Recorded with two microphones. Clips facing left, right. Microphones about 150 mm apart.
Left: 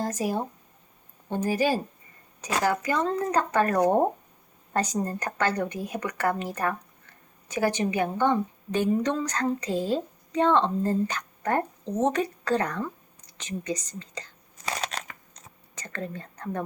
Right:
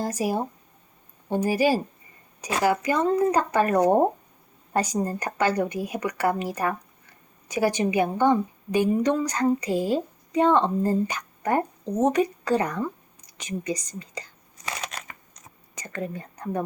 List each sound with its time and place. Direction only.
0.0 s a woman's voice: 10° right (ahead or behind)
14.6 s crushing: 30° left (ahead or behind)
15.7 s speech: 10° right (ahead or behind)